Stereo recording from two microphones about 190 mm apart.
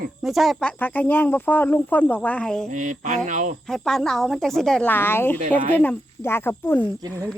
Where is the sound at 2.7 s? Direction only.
40° right (ahead or behind).